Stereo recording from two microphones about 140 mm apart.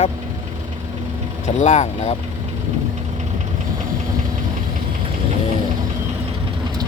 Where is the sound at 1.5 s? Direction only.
55° left (ahead or behind).